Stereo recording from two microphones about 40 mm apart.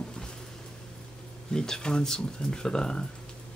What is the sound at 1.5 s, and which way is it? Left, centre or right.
Speech, centre.